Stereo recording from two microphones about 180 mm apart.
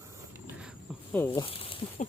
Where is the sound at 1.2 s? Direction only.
30° left (ahead or behind).